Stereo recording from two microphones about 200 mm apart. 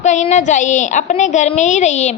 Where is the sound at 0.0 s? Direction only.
35° left (ahead or behind).